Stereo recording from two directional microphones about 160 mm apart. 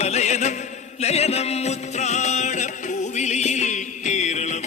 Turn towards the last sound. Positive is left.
turn(degrees=45)  # may be behind; listen again after turning